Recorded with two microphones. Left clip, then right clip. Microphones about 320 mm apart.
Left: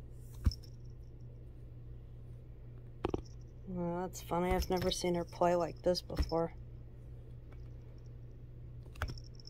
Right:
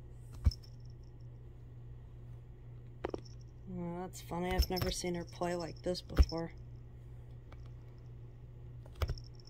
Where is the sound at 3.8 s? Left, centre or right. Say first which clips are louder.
Left 5 dB; centre.